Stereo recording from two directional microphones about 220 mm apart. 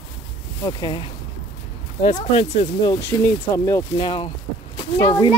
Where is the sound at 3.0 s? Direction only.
15° left (ahead or behind).